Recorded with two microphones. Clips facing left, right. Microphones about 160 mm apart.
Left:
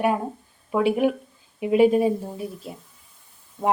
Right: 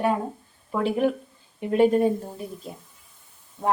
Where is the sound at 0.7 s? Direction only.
10° left (ahead or behind).